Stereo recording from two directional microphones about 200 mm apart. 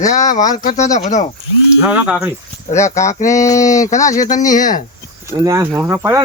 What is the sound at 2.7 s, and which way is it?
Speech, 35° left (ahead or behind).